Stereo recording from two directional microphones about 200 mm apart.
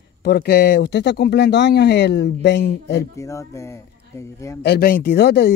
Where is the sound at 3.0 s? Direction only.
15° left (ahead or behind).